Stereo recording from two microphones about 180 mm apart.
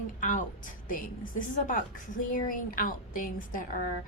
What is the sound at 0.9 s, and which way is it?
A woman's voice, 50° left (ahead or behind).